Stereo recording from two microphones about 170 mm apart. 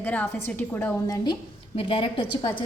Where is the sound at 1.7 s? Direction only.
35° left (ahead or behind).